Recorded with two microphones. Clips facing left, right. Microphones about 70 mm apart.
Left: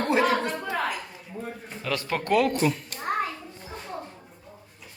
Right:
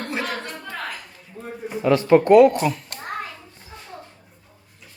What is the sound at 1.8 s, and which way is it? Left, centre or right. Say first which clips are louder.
Speech: right 13 dB; right.